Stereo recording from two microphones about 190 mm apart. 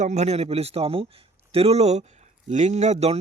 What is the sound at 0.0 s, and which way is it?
Speech, 35° right (ahead or behind).